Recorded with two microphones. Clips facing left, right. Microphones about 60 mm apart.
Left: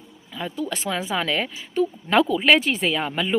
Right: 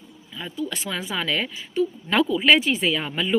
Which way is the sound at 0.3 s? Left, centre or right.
Left.